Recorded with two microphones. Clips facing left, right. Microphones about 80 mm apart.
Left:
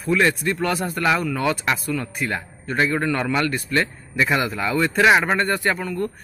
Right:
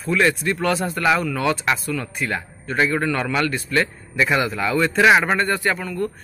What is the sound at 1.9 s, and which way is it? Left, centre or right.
Speech, left.